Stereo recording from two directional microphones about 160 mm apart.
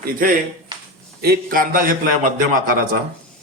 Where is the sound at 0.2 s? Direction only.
60° right (ahead or behind).